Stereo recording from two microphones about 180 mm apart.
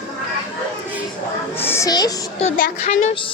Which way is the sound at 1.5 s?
15° left (ahead or behind).